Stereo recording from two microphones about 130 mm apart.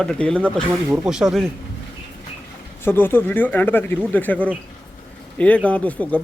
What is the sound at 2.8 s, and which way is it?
Speech, 15° left (ahead or behind).